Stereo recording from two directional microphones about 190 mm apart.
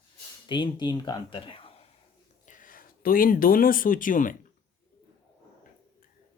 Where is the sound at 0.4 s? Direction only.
25° left (ahead or behind).